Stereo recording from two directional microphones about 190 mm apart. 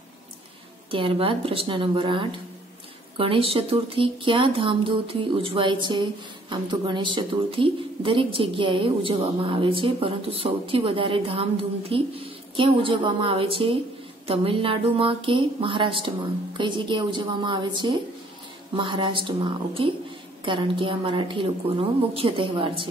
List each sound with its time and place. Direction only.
0.9 s a woman's voice: 30° right (ahead or behind)